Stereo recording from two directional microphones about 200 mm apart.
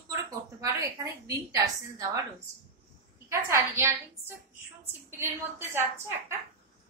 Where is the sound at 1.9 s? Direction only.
15° right (ahead or behind).